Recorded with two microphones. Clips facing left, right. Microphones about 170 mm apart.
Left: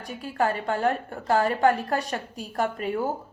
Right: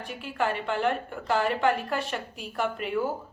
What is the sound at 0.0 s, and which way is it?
A woman's voice, 40° left (ahead or behind).